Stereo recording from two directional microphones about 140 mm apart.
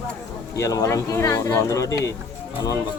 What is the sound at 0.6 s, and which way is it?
Speech, 20° left (ahead or behind).